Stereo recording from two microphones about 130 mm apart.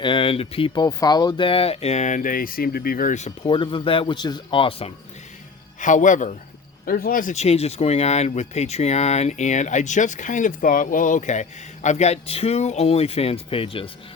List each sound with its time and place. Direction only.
0.0 s speech: 40° left (ahead or behind)
0.7 s speech: 30° left (ahead or behind); by 3.3 s 70° left (ahead or behind)
3.4 s speech: 40° left (ahead or behind)
5.8 s speech: 75° left (ahead or behind)
6.8 s speech: 90° left; by 13.9 s 45° left (ahead or behind)